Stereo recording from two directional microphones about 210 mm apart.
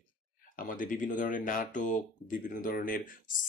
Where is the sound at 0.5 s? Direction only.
40° left (ahead or behind).